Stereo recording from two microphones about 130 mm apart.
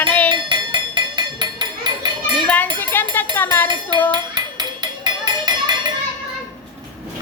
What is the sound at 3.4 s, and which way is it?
Speech, 15° left (ahead or behind).